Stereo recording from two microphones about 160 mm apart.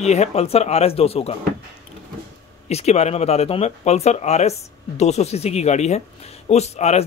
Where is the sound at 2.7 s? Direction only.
40° left (ahead or behind).